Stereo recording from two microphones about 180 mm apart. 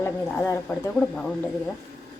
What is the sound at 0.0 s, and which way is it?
A woman's voice, 10° left (ahead or behind).